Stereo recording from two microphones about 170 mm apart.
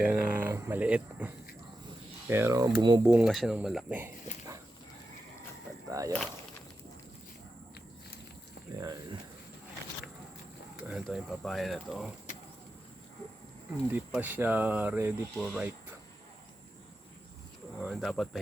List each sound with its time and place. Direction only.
0.0 s speech: 10° right (ahead or behind)
3.1 s speech: 5° right (ahead or behind)
5.9 s speech: 20° right (ahead or behind)
8.8 s a sound: 20° right (ahead or behind)
10.8 s speech: centre (ahead or behind)
14.2 s speech: 10° right (ahead or behind)
17.7 s speech: 5° right (ahead or behind)